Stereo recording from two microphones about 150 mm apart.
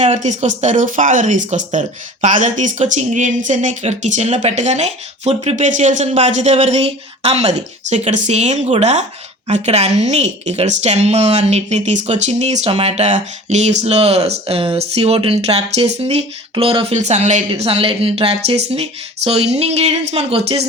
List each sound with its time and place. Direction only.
0.0 s a woman's voice: 50° right (ahead or behind)